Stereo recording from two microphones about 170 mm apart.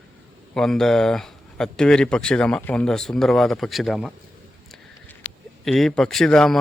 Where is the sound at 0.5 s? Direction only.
5° left (ahead or behind).